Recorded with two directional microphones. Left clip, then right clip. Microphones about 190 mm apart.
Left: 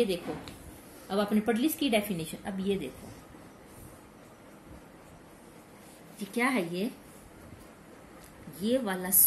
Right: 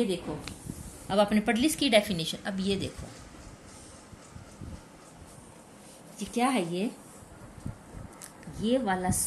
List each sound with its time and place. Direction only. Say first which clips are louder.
1.0 s a woman's voice: right 4 dB; 30° right (ahead or behind)
6.1 s a woman's voice: right 1 dB; 30° right (ahead or behind)
8.5 s a woman's voice: right 2 dB; 20° right (ahead or behind)